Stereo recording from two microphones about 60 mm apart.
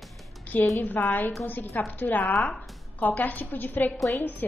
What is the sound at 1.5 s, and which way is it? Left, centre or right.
Music, left.